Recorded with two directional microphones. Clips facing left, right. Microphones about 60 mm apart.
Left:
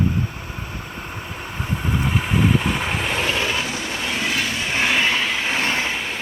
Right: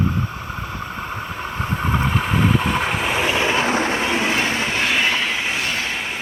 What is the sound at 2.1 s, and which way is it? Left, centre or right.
Vehicle, centre.